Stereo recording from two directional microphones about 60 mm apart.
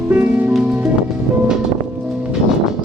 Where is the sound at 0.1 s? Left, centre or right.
Right.